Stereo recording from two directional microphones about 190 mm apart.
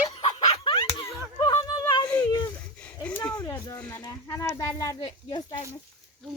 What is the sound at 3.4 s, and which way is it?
Speech, 15° left (ahead or behind).